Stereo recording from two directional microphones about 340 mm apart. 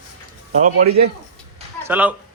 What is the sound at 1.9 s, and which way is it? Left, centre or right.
Speech, centre.